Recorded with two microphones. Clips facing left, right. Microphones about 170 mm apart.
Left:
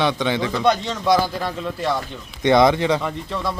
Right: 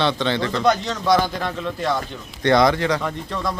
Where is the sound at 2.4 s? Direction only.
20° left (ahead or behind).